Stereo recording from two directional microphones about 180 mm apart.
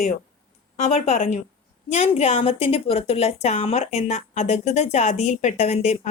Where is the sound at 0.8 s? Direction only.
40° left (ahead or behind).